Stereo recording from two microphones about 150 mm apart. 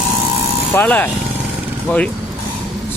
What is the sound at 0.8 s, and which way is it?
Speech, 10° left (ahead or behind).